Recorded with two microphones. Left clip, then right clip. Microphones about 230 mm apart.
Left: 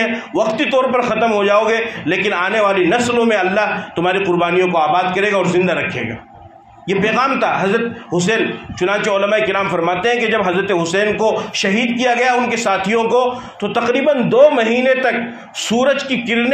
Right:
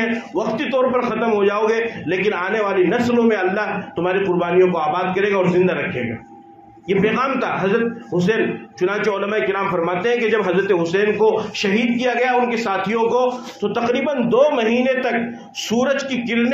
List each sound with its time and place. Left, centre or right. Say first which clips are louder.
0.0 s a man's voice: left 5 dB; left
6.9 s a man's voice: left 3 dB; left